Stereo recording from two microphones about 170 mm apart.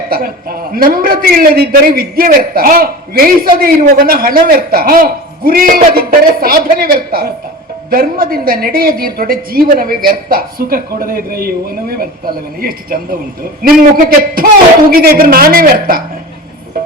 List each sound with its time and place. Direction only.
0.7 s a woman's voice: 60° right (ahead or behind)